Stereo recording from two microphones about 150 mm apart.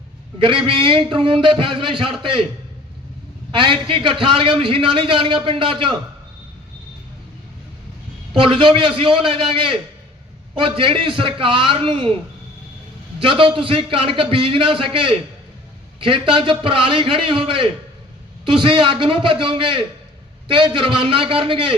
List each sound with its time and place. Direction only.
0.3 s a man's voice: 35° right (ahead or behind)
3.5 s a man's voice: 35° right (ahead or behind)
8.4 s a man's voice: 35° right (ahead or behind)
13.1 s a man's voice: 35° right (ahead or behind)